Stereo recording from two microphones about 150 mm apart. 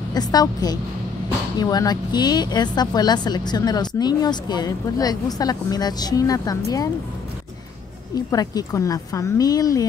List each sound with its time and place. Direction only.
0.1 s a woman's voice: 25° left (ahead or behind)
8.1 s a woman's voice: 25° left (ahead or behind)